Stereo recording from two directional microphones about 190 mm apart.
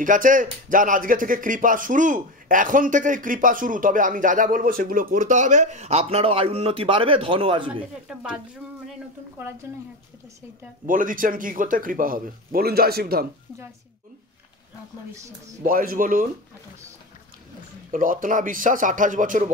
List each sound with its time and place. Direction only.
0.0 s speech: 45° right (ahead or behind); by 7.7 s 25° right (ahead or behind)
8.1 s speech: 5° right (ahead or behind)
10.9 s speech: 45° right (ahead or behind)
15.1 s speech: 15° right (ahead or behind)
15.6 s speech: 50° right (ahead or behind)
17.9 s speech: 45° right (ahead or behind)